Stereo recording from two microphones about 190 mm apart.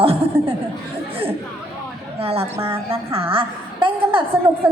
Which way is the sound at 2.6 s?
30° right (ahead or behind).